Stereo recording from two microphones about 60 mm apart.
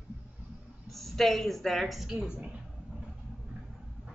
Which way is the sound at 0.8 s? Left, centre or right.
Centre.